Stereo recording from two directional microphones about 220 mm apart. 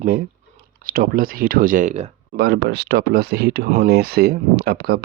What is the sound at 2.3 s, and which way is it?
Speech, 50° right (ahead or behind).